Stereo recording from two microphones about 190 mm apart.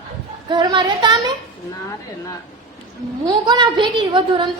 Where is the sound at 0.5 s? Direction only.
20° right (ahead or behind).